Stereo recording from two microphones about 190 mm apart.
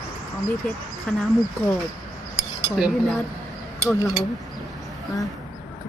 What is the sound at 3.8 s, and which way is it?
Speech, 15° left (ahead or behind).